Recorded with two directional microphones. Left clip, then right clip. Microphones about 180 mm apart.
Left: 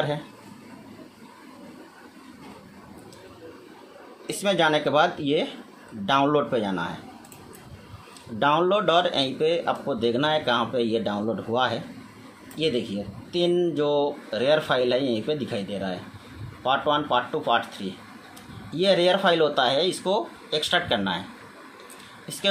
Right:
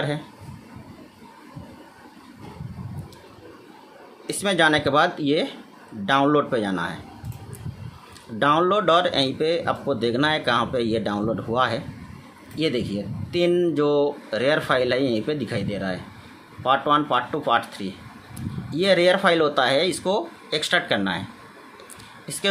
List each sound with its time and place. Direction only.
4.3 s speech: 25° right (ahead or behind)
8.4 s a man's voice: 30° right (ahead or behind)
13.4 s a man's voice: 40° right (ahead or behind)